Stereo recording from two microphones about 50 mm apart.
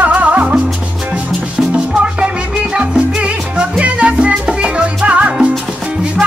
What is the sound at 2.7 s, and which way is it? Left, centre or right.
Music, right.